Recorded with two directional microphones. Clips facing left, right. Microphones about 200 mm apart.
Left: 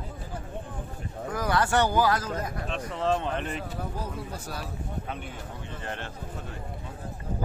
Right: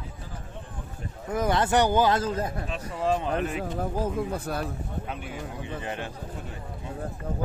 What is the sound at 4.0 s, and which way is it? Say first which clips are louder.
Speech: right 8 dB; 50° right (ahead or behind).